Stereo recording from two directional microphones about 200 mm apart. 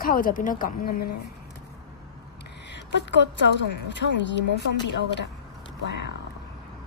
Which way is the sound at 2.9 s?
60° left (ahead or behind).